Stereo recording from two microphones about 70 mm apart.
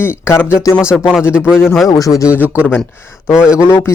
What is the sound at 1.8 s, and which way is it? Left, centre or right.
Speech, left.